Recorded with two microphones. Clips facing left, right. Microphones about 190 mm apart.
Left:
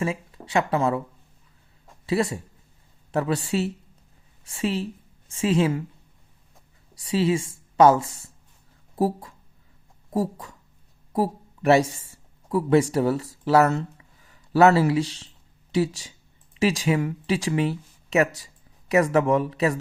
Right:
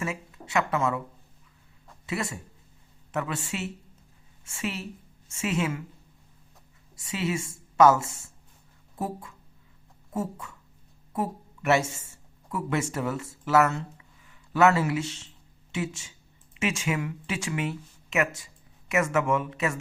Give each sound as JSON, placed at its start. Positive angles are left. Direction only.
{"t": 0.0, "sound": "speech", "side_deg": 30}
{"t": 2.0, "sound": "speech", "side_deg": 30}
{"t": 6.9, "sound": "speech", "side_deg": 30}